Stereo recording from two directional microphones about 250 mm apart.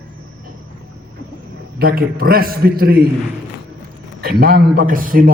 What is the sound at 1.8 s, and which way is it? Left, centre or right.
A man's voice, right.